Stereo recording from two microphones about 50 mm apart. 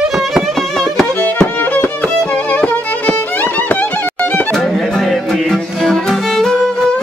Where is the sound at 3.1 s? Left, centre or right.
Left.